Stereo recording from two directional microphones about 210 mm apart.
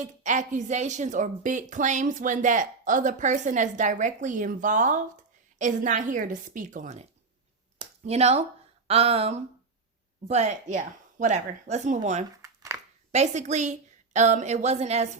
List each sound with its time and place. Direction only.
0.0 s speech: 35° right (ahead or behind)
8.9 s a sound: 30° right (ahead or behind)
10.2 s speech: 35° right (ahead or behind)